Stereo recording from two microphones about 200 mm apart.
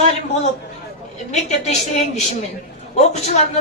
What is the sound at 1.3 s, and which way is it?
Speech, 35° left (ahead or behind).